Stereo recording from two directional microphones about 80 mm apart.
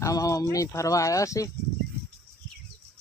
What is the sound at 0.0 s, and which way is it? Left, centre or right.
Speech, left.